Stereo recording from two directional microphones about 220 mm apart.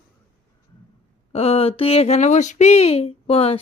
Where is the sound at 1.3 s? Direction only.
25° left (ahead or behind).